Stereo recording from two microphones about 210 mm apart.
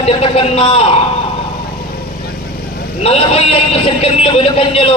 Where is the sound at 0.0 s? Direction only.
30° left (ahead or behind).